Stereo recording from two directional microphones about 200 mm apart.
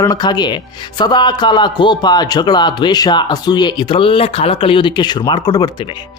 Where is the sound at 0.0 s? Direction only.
20° left (ahead or behind).